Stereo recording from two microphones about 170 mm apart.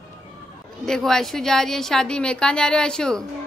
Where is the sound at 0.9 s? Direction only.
Centre (ahead or behind).